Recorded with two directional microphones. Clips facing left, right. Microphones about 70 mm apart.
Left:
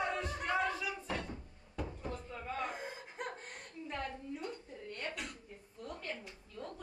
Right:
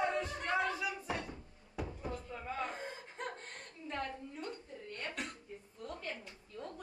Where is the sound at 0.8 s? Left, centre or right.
Centre.